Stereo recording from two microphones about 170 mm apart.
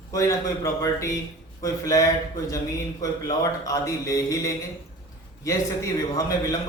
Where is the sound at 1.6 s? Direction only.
20° left (ahead or behind).